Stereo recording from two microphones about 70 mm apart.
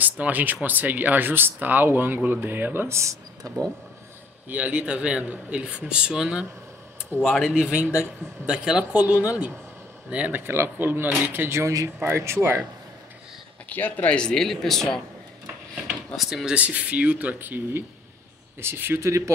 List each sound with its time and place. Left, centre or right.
0.0 s speech: right
2.9 s speech: right
4.5 s speech: right
7.1 s speech: left
7.4 s speech: centre
10.4 s a man's voice: right
13.7 s speech: left
14.1 s speech: centre
16.2 s speech: centre
16.6 s a man's voice: right
18.9 s speech: right